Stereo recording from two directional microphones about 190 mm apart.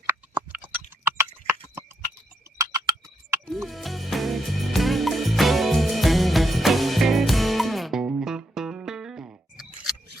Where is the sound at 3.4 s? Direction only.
Centre (ahead or behind).